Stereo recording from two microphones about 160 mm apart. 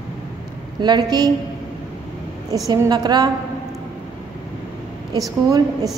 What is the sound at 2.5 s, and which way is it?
Speech, 20° right (ahead or behind).